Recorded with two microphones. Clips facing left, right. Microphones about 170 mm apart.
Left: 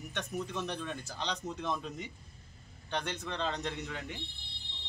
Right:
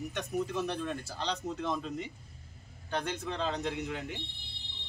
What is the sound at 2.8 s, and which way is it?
Speech, 5° right (ahead or behind).